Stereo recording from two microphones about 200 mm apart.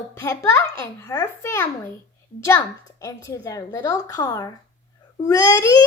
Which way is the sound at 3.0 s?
15° left (ahead or behind).